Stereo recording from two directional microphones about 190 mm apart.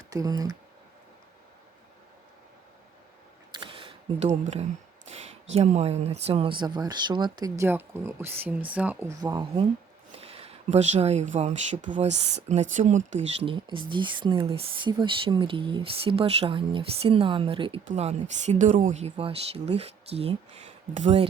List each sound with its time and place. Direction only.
0.1 s speech: 20° right (ahead or behind)
3.5 s a sound: 25° right (ahead or behind)
5.5 s speech: 35° right (ahead or behind)